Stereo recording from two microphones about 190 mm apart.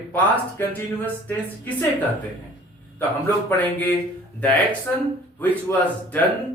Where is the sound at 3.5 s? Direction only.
10° left (ahead or behind).